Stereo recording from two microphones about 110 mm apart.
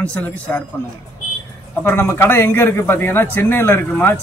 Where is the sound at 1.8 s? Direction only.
20° left (ahead or behind).